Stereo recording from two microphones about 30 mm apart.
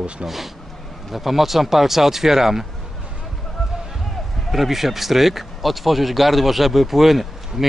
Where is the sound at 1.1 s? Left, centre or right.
Centre.